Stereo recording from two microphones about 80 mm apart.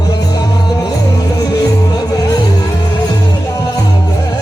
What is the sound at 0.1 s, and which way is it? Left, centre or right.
Music, left.